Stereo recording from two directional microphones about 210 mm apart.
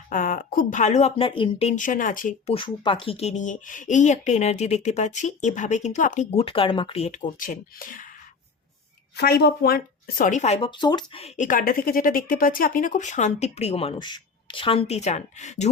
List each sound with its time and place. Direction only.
0.1 s speech: 40° left (ahead or behind)
2.5 s speech: 25° left (ahead or behind); by 8.0 s 40° left (ahead or behind)
9.1 s speech: 50° left (ahead or behind); by 15.7 s 35° left (ahead or behind)